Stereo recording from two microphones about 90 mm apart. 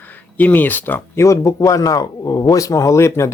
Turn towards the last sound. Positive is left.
turn(degrees=30)  # may be behind; listen again after turning